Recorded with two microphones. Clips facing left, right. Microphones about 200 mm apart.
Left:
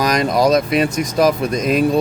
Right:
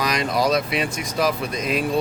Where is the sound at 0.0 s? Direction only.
45° left (ahead or behind).